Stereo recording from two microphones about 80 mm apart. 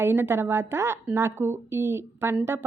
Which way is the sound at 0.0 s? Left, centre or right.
Right.